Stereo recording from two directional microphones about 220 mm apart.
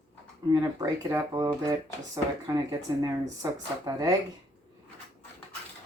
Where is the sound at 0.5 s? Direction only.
15° right (ahead or behind).